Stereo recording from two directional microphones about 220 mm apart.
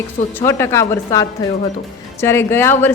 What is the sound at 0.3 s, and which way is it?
A woman's voice, 10° left (ahead or behind).